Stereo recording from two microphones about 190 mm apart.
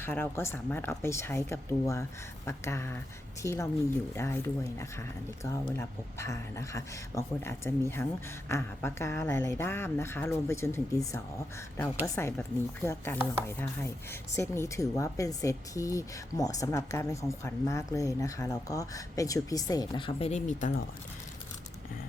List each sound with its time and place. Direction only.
0.0 s a woman's voice: 10° left (ahead or behind); by 20.7 s 40° left (ahead or behind)